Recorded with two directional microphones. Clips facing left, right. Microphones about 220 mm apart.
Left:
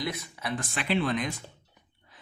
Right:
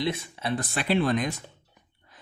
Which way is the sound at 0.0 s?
25° right (ahead or behind).